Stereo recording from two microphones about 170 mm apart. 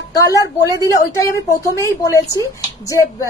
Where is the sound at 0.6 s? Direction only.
20° left (ahead or behind).